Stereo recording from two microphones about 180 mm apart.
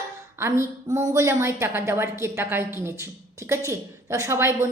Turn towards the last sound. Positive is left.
turn(degrees=-15)  # may be behind; listen again after turning